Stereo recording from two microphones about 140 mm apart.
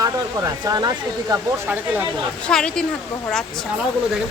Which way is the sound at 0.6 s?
25° right (ahead or behind).